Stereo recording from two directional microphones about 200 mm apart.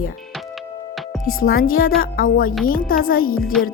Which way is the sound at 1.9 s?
45° left (ahead or behind).